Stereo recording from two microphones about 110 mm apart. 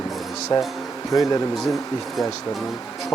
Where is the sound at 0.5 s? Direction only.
50° left (ahead or behind).